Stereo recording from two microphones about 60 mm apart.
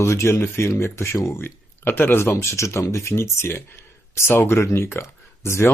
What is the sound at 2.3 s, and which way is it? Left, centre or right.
Speech, left.